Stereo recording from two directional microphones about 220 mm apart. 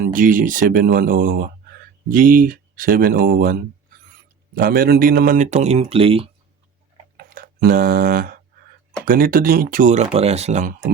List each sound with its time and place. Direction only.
0.0 s speech: 40° right (ahead or behind)
7.2 s a sound: 40° right (ahead or behind)
9.0 s speech: 40° right (ahead or behind)